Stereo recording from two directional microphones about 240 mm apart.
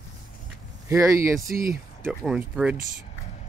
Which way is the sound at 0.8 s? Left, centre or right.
Centre.